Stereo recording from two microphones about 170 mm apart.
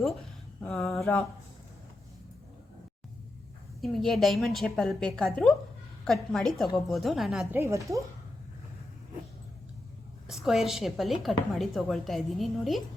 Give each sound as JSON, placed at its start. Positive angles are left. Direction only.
{"t": 0.6, "sound": "a woman's voice", "side_deg": 0}
{"t": 3.8, "sound": "a woman's voice", "side_deg": 0}
{"t": 7.5, "sound": "a woman's voice", "side_deg": -15}
{"t": 10.2, "sound": "a woman's voice", "side_deg": 0}